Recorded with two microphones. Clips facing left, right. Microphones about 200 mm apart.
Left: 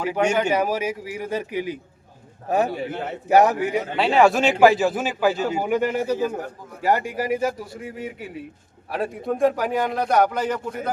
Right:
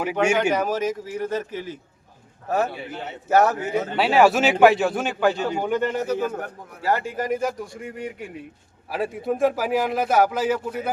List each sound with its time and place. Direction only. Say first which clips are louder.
0.0 s speech: even; 10° right (ahead or behind)
0.5 s a man's voice: even; 10° left (ahead or behind)
3.9 s a man's voice: even; 5° right (ahead or behind)